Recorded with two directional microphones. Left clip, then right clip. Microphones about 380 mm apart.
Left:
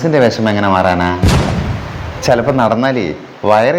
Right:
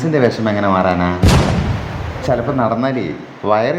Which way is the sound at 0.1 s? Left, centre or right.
Centre.